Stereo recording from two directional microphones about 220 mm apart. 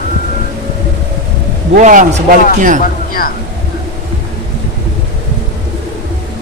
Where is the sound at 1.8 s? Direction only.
35° right (ahead or behind).